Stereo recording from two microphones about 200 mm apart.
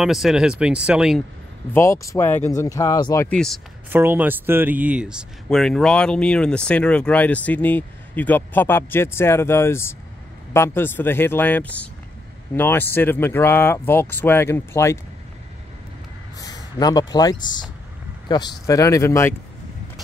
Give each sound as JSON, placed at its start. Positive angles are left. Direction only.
{"t": 0.0, "sound": "speech", "side_deg": 0}
{"t": 1.7, "sound": "speech", "side_deg": 15}
{"t": 3.3, "sound": "speech", "side_deg": 0}
{"t": 3.9, "sound": "speech", "side_deg": -10}
{"t": 16.3, "sound": "speech", "side_deg": 20}